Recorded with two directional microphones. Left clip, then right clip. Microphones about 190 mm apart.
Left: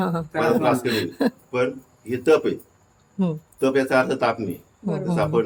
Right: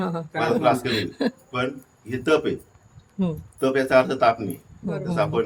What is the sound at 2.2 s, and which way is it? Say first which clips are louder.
Speech: left 3 dB; 5° right (ahead or behind).